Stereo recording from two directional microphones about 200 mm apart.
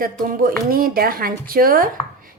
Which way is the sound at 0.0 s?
45° right (ahead or behind).